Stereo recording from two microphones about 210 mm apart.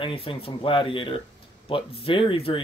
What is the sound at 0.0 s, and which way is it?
Speech, 25° left (ahead or behind).